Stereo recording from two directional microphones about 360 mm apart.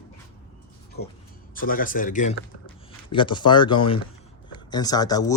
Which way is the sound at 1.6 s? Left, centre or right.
Left.